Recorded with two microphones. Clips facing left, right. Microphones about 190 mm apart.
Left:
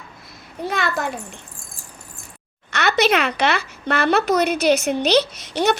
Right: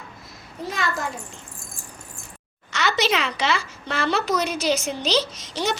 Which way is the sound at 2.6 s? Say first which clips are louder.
Left 4 dB; 60° left (ahead or behind).